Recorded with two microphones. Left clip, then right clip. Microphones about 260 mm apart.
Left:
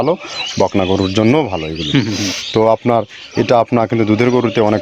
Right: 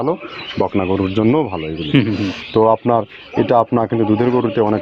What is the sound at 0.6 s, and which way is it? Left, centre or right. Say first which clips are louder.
Speech: left 3 dB; left.